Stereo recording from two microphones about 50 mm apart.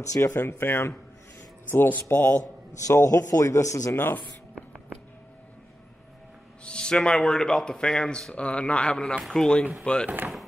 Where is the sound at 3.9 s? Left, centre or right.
Left.